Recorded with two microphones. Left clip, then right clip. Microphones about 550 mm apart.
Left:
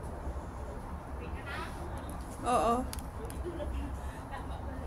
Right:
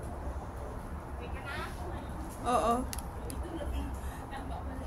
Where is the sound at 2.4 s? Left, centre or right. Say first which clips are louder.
Even; right.